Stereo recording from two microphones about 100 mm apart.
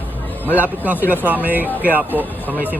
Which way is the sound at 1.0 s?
20° left (ahead or behind).